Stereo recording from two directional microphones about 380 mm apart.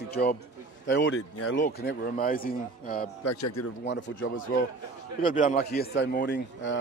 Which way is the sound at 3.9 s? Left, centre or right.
Left.